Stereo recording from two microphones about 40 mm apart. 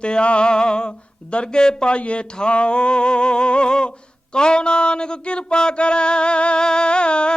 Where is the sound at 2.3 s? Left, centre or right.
Left.